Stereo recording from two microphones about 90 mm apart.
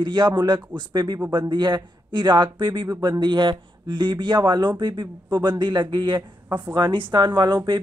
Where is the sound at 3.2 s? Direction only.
60° right (ahead or behind).